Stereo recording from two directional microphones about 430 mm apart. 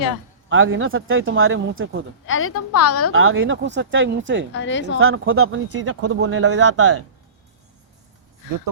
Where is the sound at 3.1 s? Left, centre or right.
Right.